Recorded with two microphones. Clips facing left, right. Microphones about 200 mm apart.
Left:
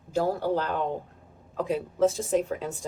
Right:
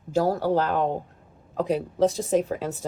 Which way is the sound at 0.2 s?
40° right (ahead or behind).